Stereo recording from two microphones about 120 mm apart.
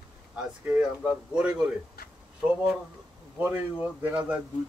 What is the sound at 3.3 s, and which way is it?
Speech, 15° right (ahead or behind).